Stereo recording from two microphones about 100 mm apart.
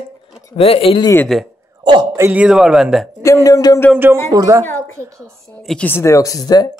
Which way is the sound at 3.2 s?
30° left (ahead or behind).